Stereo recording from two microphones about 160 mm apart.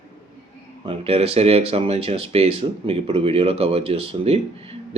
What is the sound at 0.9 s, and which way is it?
Speech, 35° right (ahead or behind).